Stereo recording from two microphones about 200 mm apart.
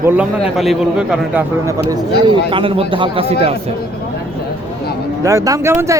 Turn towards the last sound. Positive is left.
turn(degrees=-15)  # may be behind; listen again after turning